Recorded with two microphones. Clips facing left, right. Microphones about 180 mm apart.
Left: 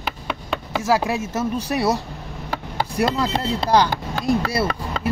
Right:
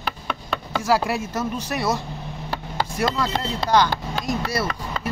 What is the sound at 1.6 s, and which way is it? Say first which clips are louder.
Speech: left 3 dB; 35° left (ahead or behind).